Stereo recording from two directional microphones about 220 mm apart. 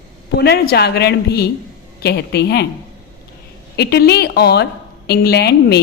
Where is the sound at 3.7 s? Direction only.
45° left (ahead or behind).